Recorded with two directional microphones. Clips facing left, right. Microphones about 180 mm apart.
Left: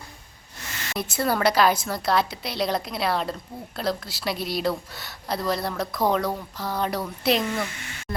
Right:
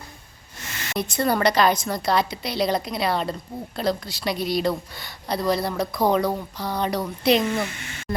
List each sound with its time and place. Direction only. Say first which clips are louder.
0.9 s a woman's voice: right 2 dB; 5° left (ahead or behind)